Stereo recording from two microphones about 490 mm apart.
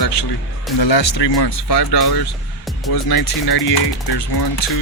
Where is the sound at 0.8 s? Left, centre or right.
Left.